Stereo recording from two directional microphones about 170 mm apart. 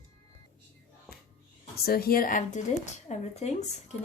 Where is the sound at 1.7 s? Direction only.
65° left (ahead or behind).